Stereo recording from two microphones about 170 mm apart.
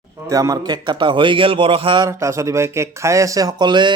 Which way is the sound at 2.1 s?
15° right (ahead or behind).